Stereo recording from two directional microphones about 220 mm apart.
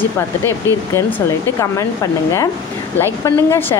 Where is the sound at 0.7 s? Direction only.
10° left (ahead or behind).